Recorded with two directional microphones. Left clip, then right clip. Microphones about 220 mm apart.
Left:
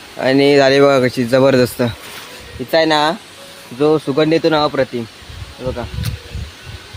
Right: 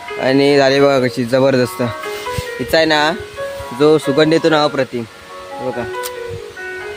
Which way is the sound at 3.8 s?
20° right (ahead or behind).